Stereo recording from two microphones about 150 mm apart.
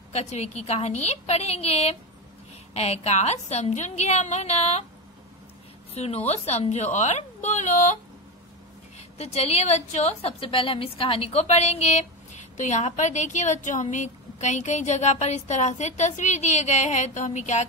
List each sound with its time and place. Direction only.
0.1 s a woman's voice: 45° left (ahead or behind)
5.9 s a woman's voice: 45° left (ahead or behind)